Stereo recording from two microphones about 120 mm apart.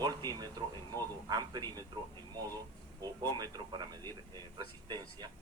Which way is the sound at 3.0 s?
35° right (ahead or behind).